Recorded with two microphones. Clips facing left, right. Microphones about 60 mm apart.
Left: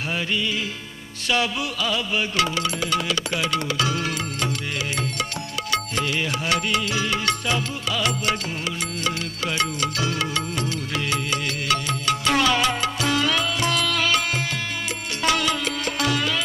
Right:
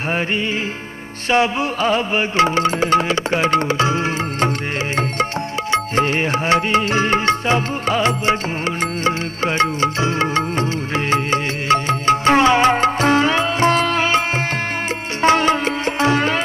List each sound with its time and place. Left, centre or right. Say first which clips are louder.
1.3 s music: right 7 dB; right
5.7 s music: right 7 dB; right
15.2 s music: right 8 dB; right